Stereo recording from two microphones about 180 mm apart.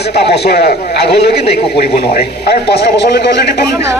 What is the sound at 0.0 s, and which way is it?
A man's voice, 65° left (ahead or behind).